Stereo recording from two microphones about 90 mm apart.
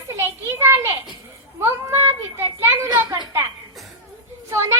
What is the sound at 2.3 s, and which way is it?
Children playing, 25° right (ahead or behind).